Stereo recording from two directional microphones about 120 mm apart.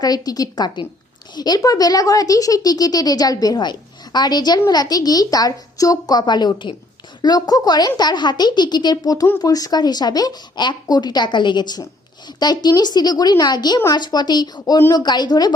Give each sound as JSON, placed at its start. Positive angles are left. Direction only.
{"t": 0.0, "sound": "speech", "side_deg": 30}